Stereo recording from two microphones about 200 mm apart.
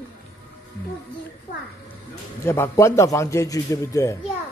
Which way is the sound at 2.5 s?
15° left (ahead or behind).